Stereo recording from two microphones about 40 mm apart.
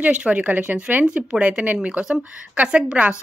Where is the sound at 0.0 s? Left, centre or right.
Right.